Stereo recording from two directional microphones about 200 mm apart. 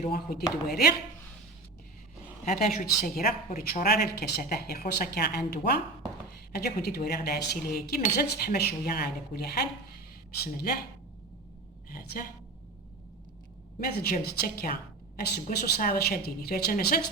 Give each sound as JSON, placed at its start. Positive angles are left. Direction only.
{"t": 0.0, "sound": "a woman's voice", "side_deg": 45}
{"t": 2.4, "sound": "a woman's voice", "side_deg": 40}
{"t": 11.9, "sound": "a woman's voice", "side_deg": 45}
{"t": 13.7, "sound": "a woman's voice", "side_deg": 45}